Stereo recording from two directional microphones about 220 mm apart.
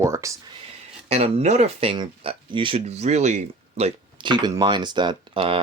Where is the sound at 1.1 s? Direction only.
30° right (ahead or behind).